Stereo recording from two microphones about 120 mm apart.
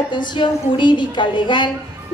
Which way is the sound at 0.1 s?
40° left (ahead or behind).